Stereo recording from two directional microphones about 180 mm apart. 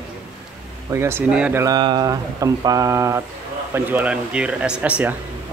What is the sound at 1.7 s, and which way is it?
Speech, 25° right (ahead or behind).